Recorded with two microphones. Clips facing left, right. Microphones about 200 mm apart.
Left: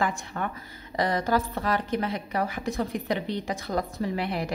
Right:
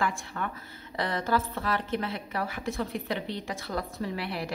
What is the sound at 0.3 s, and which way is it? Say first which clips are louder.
Speech: left 4 dB; 40° left (ahead or behind).